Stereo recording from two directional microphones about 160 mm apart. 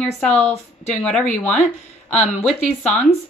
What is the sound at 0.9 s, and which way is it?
Speech, 5° left (ahead or behind).